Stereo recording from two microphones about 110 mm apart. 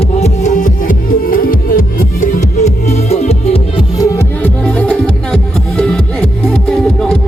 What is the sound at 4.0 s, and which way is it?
Music, 30° left (ahead or behind).